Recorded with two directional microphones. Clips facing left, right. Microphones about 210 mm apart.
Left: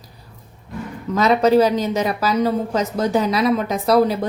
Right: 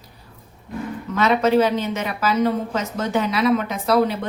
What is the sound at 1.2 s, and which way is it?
Speech, 35° left (ahead or behind).